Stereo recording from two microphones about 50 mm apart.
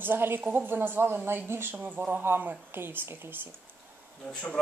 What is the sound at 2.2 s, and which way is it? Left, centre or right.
Speech, right.